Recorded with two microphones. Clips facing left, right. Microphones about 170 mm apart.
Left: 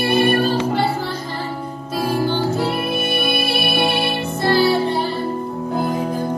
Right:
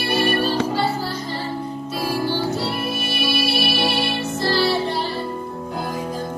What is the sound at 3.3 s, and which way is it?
Music, 55° left (ahead or behind).